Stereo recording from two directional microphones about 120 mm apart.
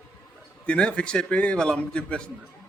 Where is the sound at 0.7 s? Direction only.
10° left (ahead or behind).